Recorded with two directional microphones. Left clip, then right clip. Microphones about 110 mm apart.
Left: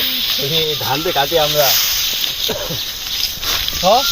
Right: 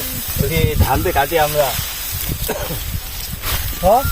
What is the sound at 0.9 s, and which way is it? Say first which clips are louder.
Speech: right 1 dB; 45° right (ahead or behind).